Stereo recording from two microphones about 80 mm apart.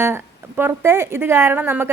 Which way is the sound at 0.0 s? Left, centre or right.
Right.